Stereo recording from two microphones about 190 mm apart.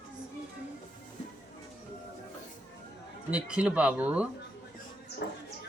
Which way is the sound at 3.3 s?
5° right (ahead or behind).